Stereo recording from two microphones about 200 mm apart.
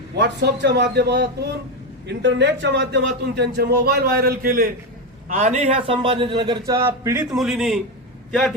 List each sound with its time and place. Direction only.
0.2 s a man's voice: 60° right (ahead or behind); by 7.3 s 15° right (ahead or behind)
7.3 s a man's voice: centre (ahead or behind)